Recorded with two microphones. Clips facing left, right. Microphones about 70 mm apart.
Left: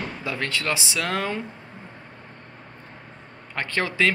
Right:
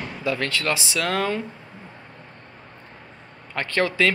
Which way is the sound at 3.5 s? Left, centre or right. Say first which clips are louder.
Right 3 dB; left.